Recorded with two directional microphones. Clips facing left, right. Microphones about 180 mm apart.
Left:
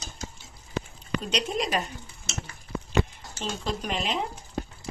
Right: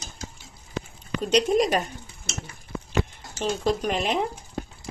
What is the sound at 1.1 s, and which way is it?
Speech, 45° right (ahead or behind).